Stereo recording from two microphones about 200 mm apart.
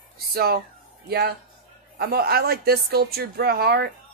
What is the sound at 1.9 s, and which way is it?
A woman's voice, 50° right (ahead or behind).